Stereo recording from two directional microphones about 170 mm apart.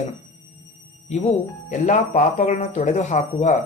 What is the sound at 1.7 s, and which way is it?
Speech, 50° left (ahead or behind).